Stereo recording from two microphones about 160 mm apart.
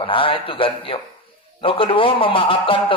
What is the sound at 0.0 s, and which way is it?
A man's voice, 35° left (ahead or behind).